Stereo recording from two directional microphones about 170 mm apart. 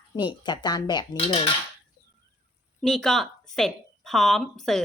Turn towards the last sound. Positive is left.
turn(degrees=0)  # may be behind; listen again after turning